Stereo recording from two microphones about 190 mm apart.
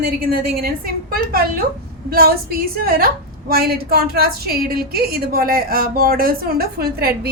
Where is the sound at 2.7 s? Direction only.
50° right (ahead or behind).